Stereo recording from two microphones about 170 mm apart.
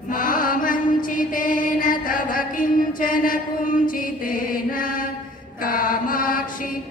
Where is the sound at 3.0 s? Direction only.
55° left (ahead or behind).